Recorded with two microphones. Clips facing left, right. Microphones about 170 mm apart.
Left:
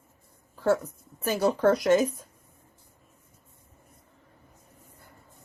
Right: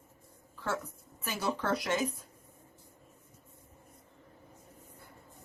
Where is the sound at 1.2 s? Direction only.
40° left (ahead or behind).